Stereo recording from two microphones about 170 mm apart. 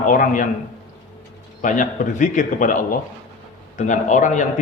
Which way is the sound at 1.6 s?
50° left (ahead or behind).